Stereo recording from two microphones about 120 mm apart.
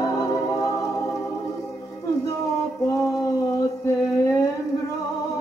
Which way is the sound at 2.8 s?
25° left (ahead or behind).